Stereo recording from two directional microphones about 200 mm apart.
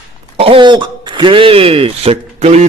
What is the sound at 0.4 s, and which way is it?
Speech, 25° right (ahead or behind).